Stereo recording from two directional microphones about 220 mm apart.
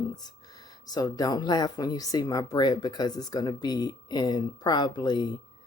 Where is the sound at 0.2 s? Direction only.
20° left (ahead or behind).